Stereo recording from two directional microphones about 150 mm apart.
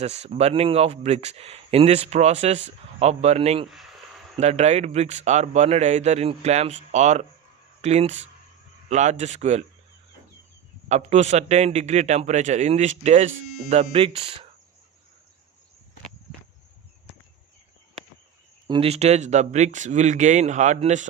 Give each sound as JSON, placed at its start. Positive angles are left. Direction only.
{"t": 0.0, "sound": "speech", "side_deg": -45}
{"t": 10.8, "sound": "speech", "side_deg": -50}
{"t": 18.7, "sound": "speech", "side_deg": -40}